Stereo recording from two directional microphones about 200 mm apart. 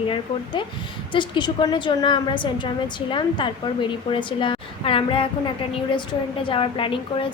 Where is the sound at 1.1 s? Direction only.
25° left (ahead or behind).